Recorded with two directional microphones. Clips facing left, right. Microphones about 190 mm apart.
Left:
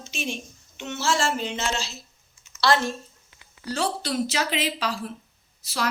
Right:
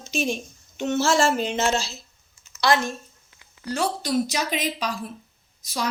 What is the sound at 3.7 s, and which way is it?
A woman's voice, 10° right (ahead or behind).